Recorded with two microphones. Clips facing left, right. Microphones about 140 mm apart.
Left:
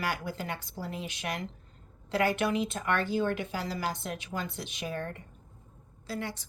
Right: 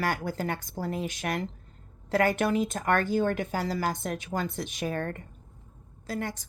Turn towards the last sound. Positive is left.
turn(degrees=-45)  # may be behind; listen again after turning